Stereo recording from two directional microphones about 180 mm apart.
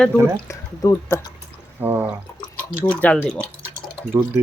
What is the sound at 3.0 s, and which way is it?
Speech, 5° left (ahead or behind).